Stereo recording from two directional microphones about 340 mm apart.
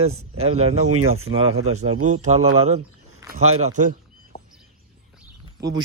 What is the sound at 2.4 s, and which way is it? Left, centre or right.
Speech, right.